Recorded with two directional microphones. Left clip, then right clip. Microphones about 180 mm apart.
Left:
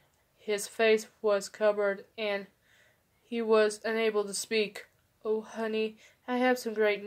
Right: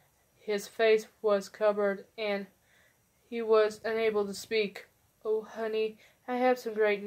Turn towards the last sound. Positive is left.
turn(degrees=40)  # may be behind; listen again after turning